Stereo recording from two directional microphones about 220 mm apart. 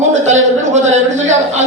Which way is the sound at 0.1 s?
30° right (ahead or behind).